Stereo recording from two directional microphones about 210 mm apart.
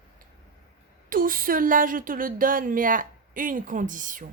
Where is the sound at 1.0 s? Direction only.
40° right (ahead or behind).